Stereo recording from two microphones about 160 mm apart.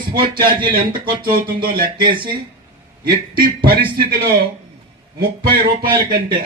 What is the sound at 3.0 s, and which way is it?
Speech, 65° right (ahead or behind).